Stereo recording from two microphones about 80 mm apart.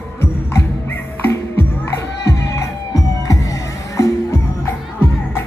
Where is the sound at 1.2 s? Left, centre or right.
Left.